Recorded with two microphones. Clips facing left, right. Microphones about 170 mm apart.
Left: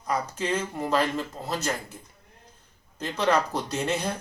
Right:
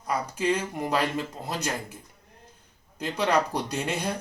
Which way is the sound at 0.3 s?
10° right (ahead or behind).